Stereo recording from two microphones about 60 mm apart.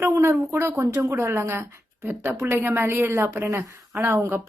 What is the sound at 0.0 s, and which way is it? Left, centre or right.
A woman's voice, right.